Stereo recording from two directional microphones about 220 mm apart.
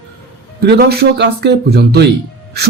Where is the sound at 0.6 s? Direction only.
45° right (ahead or behind).